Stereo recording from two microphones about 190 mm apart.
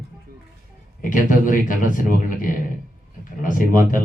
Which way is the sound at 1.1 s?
45° left (ahead or behind).